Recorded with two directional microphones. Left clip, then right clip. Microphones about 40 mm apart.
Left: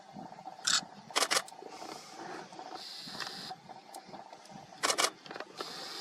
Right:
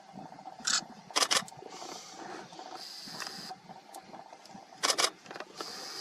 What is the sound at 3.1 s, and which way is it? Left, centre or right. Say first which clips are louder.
Printer: even; right.